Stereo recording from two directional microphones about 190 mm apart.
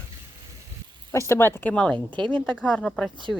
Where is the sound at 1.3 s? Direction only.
15° left (ahead or behind).